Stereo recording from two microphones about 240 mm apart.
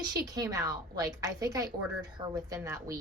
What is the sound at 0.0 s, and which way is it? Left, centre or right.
A woman's voice, centre.